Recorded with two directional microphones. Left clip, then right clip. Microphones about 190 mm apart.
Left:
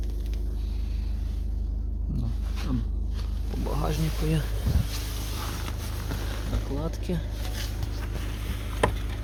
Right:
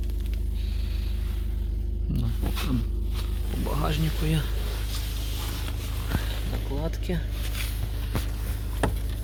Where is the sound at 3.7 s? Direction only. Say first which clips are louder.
Right 1 dB; centre (ahead or behind).